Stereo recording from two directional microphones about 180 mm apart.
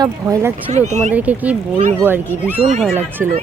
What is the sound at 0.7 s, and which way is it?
Speech, 40° right (ahead or behind).